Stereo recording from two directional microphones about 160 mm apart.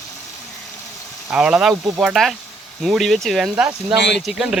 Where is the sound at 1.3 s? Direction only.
5° right (ahead or behind).